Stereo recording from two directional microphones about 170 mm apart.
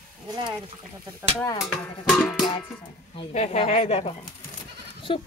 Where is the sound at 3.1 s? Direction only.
40° left (ahead or behind).